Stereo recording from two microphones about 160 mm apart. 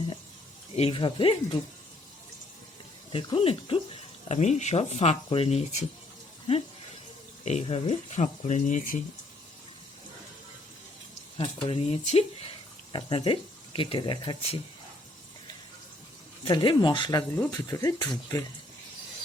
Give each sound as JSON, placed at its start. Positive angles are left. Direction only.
{"t": 0.8, "sound": "speech", "side_deg": 35}
{"t": 3.1, "sound": "speech", "side_deg": 35}
{"t": 4.3, "sound": "speech", "side_deg": 45}
{"t": 7.4, "sound": "speech", "side_deg": 45}
{"t": 11.3, "sound": "speech", "side_deg": 30}
{"t": 16.4, "sound": "speech", "side_deg": 30}